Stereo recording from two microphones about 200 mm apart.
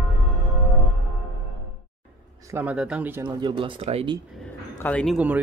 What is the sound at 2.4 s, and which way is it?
Speech, 10° right (ahead or behind).